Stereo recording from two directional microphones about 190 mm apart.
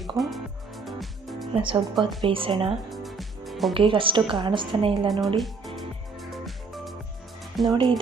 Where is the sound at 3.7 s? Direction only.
25° right (ahead or behind).